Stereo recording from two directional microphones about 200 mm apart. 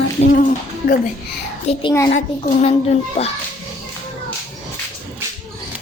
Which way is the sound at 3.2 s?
30° left (ahead or behind).